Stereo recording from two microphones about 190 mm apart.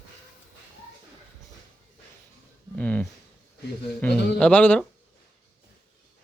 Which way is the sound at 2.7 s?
5° left (ahead or behind).